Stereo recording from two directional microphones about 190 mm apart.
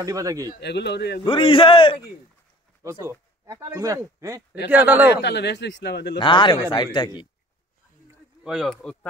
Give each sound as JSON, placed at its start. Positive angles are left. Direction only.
{"t": 0.0, "sound": "speech", "side_deg": -15}
{"t": 0.6, "sound": "a man's voice", "side_deg": 60}
{"t": 1.2, "sound": "a man's voice", "side_deg": 25}
{"t": 2.8, "sound": "speech", "side_deg": -15}
{"t": 5.1, "sound": "a man's voice", "side_deg": 65}
{"t": 6.1, "sound": "a man's voice", "side_deg": 25}
{"t": 8.5, "sound": "speech", "side_deg": 0}